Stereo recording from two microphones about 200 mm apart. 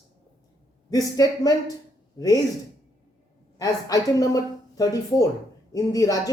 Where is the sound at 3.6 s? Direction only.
20° left (ahead or behind).